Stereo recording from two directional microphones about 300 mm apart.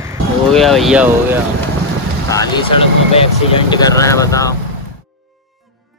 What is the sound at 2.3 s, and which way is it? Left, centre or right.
Speech, centre.